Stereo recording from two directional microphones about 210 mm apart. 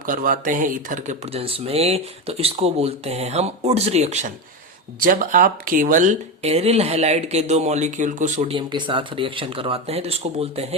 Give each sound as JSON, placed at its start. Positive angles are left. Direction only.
{"t": 0.0, "sound": "speech", "side_deg": -40}